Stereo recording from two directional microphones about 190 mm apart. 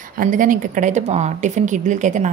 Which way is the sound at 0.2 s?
45° right (ahead or behind).